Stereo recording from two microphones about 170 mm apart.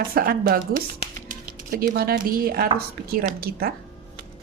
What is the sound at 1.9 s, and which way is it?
A woman's voice, 65° right (ahead or behind).